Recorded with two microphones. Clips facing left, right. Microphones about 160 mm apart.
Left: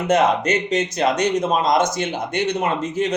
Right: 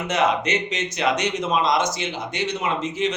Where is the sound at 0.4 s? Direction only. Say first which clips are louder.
Left 5 dB; 35° left (ahead or behind).